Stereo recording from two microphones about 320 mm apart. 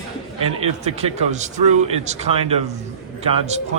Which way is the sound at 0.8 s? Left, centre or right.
Right.